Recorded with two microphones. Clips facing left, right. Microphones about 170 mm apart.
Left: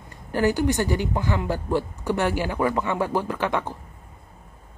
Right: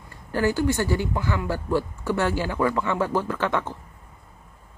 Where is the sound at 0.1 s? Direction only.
20° left (ahead or behind).